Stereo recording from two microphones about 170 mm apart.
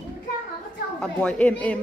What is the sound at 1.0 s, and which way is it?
Speech, 5° left (ahead or behind).